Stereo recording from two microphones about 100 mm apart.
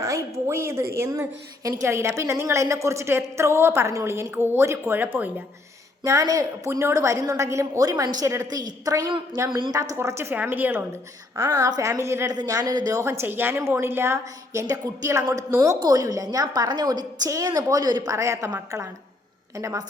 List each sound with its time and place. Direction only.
0.4 s a woman's voice: 25° right (ahead or behind)
6.0 s a woman's voice: 35° right (ahead or behind)
9.0 s a woman's voice: 50° right (ahead or behind)
9.7 s a woman's voice: 30° right (ahead or behind)
11.7 s a woman's voice: 30° right (ahead or behind)
13.0 s a woman's voice: 25° right (ahead or behind)
15.8 s a woman's voice: 40° right (ahead or behind)